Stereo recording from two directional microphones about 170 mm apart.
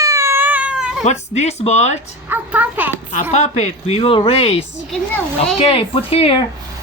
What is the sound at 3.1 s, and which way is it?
Speech, 40° left (ahead or behind).